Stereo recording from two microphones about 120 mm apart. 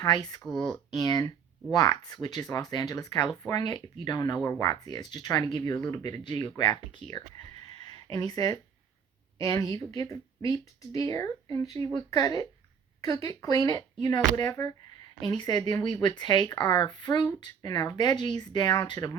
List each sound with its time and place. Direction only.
0.0 s speech: 35° left (ahead or behind)
0.4 s speech: 5° left (ahead or behind)
0.9 s a woman's voice: 30° left (ahead or behind)
8.1 s a woman's voice: 30° left (ahead or behind)